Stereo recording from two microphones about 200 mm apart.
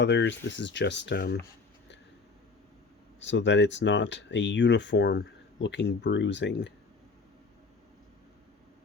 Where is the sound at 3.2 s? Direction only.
65° left (ahead or behind).